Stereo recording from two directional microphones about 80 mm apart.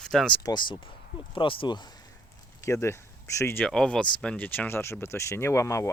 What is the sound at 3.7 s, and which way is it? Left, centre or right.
Speech, centre.